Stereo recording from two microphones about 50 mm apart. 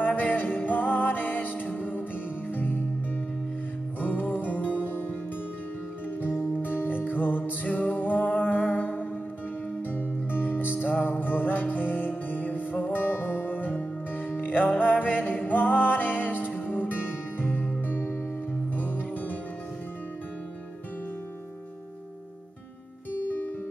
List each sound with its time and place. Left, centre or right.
0.0 s music: left
4.0 s music: left
6.6 s music: left
23.1 s music: left